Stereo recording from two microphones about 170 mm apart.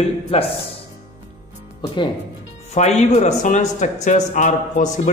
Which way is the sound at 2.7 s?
40° left (ahead or behind).